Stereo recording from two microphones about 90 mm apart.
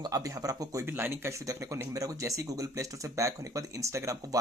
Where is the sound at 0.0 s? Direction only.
45° right (ahead or behind).